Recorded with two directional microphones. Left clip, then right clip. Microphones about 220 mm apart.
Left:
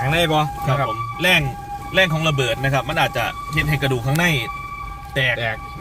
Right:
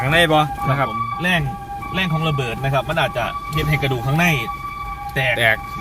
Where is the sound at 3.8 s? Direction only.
55° left (ahead or behind).